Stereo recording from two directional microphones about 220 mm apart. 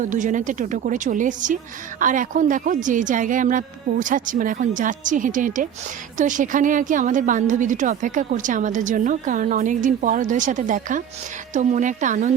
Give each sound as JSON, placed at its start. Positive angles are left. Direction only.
{"t": 0.0, "sound": "a woman's voice", "side_deg": -35}